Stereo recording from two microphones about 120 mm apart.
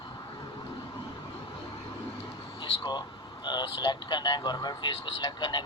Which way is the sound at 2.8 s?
35° left (ahead or behind).